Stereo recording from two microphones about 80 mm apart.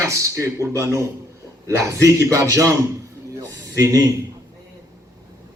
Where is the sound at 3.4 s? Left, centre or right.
Right.